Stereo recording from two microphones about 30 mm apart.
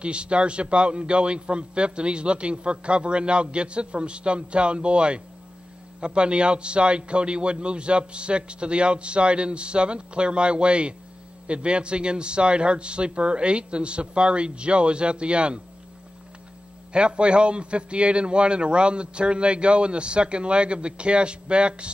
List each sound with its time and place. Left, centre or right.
0.0 s a man's voice: right
16.9 s a man's voice: right